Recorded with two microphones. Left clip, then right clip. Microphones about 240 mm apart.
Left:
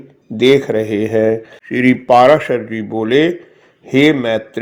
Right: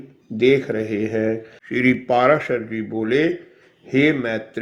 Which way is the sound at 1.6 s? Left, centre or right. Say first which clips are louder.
Left 5 dB; centre.